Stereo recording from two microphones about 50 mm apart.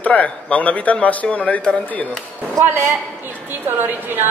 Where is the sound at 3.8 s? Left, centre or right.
Right.